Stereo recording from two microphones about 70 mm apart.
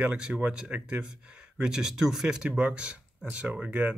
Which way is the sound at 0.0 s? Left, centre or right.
Centre.